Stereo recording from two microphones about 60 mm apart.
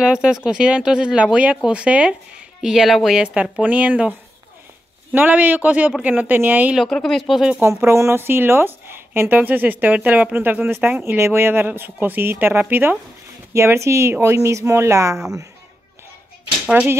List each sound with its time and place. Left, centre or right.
0.0 s speech: centre
2.6 s speech: centre
3.2 s a man's voice: right
5.1 s a man's voice: right
6.9 s speech: centre
7.3 s speech: centre
7.6 s a woman's voice: right
13.5 s speech: right